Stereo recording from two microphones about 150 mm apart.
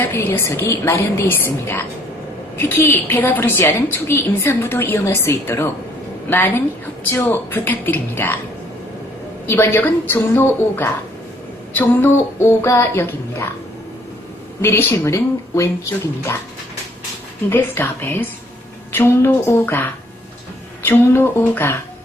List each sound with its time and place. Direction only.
0.0 s a woman's voice: 15° left (ahead or behind)
2.6 s a woman's voice: 15° left (ahead or behind)
9.5 s a woman's voice: 15° left (ahead or behind)
14.6 s a woman's voice: 15° left (ahead or behind)
17.5 s a woman's voice: 15° left (ahead or behind)